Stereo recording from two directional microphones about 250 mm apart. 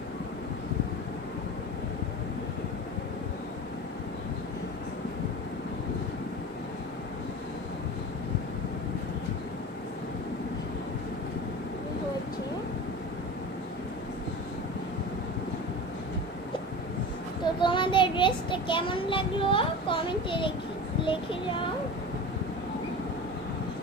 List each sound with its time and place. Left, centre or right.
17.6 s child singing: centre
21.0 s speech: centre